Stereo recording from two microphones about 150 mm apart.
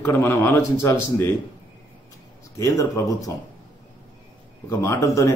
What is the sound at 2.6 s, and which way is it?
Speech, 20° left (ahead or behind).